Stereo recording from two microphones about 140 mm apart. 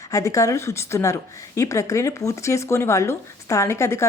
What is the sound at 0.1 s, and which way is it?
Speech, 25° left (ahead or behind).